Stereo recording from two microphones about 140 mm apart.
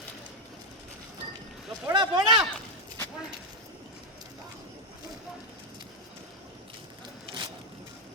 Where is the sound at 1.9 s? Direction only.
30° right (ahead or behind).